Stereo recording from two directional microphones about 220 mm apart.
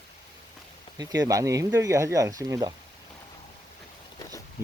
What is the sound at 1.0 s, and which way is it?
Speech, 15° right (ahead or behind).